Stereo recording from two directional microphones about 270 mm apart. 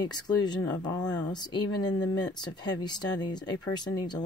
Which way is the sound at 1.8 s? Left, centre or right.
Left.